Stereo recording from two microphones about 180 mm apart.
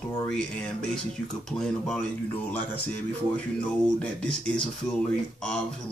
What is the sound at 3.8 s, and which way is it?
Speech, 5° left (ahead or behind).